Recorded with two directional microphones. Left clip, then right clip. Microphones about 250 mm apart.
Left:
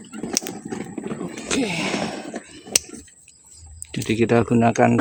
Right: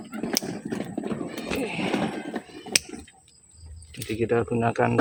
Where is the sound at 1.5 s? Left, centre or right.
Left.